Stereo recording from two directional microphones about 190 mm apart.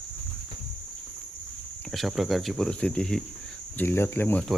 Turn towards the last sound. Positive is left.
turn(degrees=10)  # may be behind; listen again after turning